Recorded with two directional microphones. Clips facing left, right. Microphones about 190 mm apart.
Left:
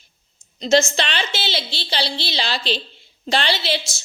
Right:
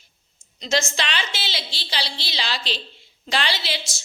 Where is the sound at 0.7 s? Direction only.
30° left (ahead or behind).